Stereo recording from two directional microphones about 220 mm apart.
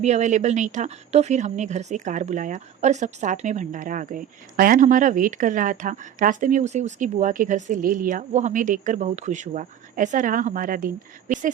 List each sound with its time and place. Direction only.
0.0 s speech: 30° right (ahead or behind)